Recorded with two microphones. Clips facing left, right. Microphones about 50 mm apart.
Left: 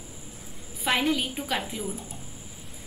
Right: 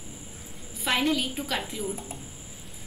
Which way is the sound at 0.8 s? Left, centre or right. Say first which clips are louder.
Even; centre.